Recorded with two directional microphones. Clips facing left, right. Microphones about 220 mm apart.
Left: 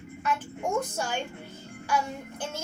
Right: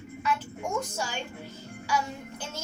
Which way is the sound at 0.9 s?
55° left (ahead or behind).